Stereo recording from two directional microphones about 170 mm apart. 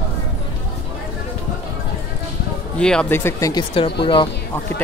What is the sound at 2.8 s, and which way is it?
Speech, 5° left (ahead or behind).